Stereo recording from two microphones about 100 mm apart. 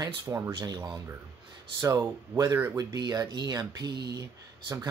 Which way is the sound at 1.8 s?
30° right (ahead or behind).